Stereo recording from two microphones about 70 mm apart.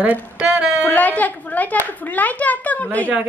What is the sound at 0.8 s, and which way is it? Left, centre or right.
A woman's voice, left.